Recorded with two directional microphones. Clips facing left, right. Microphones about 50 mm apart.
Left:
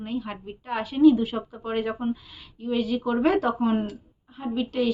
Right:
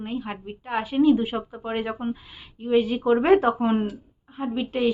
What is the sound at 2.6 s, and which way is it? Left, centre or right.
Speech, right.